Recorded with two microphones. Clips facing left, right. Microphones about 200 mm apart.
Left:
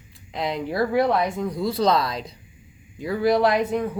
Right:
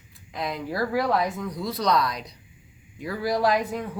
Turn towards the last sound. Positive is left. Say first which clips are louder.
# left 4 dB
turn(degrees=25)  # may be behind; listen again after turning